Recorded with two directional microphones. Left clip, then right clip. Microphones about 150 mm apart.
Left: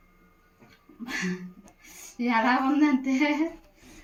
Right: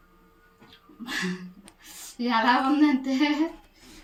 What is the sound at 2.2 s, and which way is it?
Speech, 5° left (ahead or behind).